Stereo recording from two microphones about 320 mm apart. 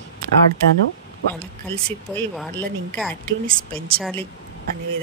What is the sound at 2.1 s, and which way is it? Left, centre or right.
Speech, centre.